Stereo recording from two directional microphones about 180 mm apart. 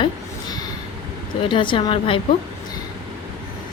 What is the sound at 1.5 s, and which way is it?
Speech, 30° left (ahead or behind).